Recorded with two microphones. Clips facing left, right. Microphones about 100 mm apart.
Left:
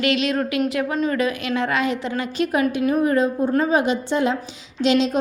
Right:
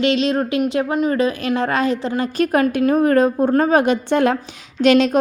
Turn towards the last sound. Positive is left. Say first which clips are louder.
# right 5 dB
turn(degrees=-60)  # may be behind; listen again after turning